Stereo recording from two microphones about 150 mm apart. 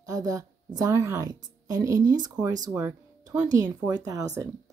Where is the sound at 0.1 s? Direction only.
25° right (ahead or behind).